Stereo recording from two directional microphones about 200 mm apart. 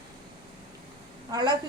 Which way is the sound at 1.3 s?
20° right (ahead or behind).